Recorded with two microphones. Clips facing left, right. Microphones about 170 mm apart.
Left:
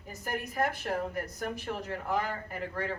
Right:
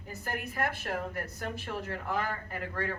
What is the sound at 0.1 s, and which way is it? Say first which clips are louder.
Speech: left 1 dB; 15° left (ahead or behind).